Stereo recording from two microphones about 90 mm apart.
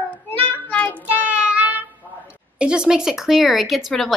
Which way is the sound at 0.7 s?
15° left (ahead or behind).